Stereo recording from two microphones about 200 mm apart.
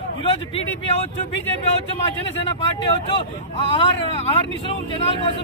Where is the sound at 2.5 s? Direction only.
25° left (ahead or behind).